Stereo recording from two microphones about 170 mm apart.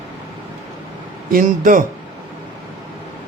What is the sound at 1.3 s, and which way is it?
Speech, 50° right (ahead or behind).